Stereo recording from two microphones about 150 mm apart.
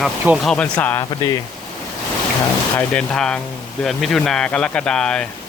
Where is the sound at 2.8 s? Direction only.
5° left (ahead or behind).